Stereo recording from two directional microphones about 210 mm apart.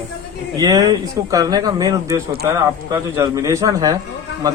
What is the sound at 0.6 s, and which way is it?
Speech, 20° right (ahead or behind).